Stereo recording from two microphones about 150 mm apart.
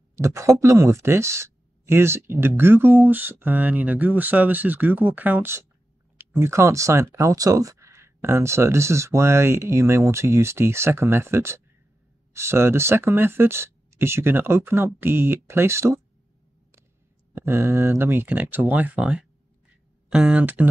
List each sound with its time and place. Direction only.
0.1 s speech: 20° right (ahead or behind)
17.3 s speech: 15° right (ahead or behind)